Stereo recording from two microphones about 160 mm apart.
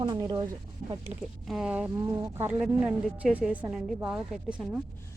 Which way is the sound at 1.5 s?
5° right (ahead or behind).